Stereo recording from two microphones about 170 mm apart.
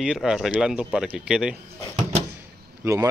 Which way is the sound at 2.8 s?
20° right (ahead or behind).